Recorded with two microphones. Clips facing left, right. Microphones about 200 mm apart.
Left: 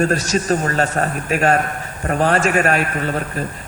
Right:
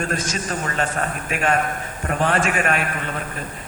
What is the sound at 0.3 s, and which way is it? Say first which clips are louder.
A man's voice: left 8 dB; 40° left (ahead or behind).